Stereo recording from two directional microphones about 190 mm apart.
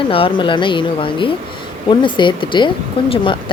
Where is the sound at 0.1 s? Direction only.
30° left (ahead or behind).